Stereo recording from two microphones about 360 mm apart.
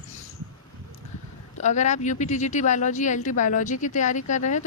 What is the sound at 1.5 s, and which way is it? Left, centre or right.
Speech, centre.